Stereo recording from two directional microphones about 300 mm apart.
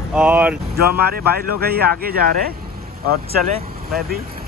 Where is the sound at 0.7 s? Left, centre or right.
Right.